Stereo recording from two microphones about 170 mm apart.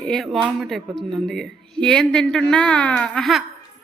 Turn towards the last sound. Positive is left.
turn(degrees=0)  # may be behind; listen again after turning